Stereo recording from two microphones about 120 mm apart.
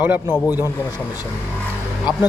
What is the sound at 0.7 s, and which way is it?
Speech, 20° left (ahead or behind).